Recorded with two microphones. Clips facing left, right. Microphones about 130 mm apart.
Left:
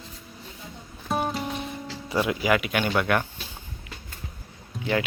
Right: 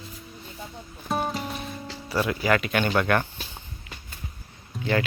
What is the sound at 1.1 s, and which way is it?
Music, centre (ahead or behind).